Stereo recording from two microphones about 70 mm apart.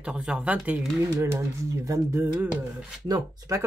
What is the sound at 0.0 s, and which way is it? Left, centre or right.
Speech, centre.